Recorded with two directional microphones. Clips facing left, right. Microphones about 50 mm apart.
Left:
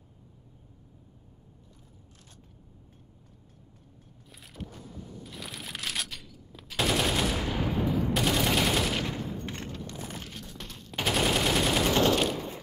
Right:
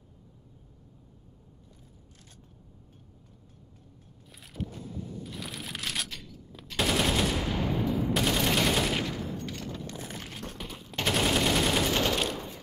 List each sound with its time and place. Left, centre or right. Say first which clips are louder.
4.3 s a sound: right 5 dB; centre
5.2 s machine gun: right 2 dB; centre
10.6 s machine gun: even; centre